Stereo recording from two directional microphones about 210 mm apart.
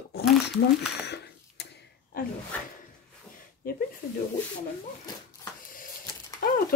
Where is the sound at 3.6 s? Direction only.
45° left (ahead or behind).